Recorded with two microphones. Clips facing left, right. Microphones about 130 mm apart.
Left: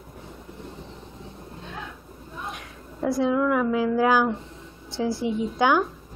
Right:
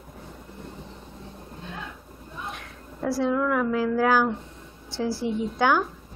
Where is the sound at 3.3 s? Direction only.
10° left (ahead or behind).